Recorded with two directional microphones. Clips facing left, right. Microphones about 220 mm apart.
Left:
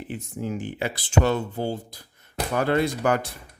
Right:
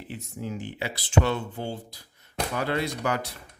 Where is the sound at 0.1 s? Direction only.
50° left (ahead or behind).